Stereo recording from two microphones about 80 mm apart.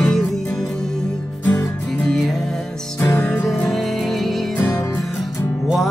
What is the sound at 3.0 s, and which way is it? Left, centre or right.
Music, left.